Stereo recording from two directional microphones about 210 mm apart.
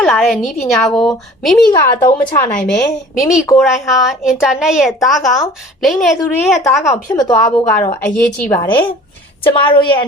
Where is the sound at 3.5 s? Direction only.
Centre (ahead or behind).